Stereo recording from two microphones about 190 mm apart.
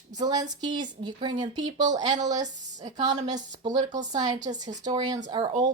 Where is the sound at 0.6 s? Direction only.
20° right (ahead or behind).